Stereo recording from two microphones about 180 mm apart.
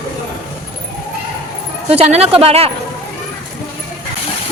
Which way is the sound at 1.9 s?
35° right (ahead or behind).